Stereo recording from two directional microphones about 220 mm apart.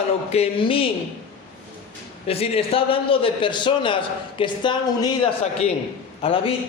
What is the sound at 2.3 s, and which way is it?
A man's voice, 25° left (ahead or behind).